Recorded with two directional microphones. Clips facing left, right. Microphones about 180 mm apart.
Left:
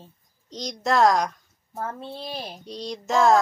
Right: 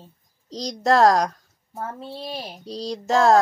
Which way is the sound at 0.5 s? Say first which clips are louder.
Right 3 dB; 35° right (ahead or behind).